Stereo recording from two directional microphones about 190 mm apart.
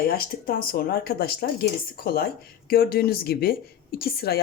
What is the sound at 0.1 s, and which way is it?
Speech, 50° left (ahead or behind).